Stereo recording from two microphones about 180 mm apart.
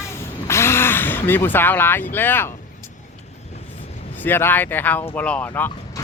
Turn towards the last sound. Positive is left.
turn(degrees=10)  # may be behind; listen again after turning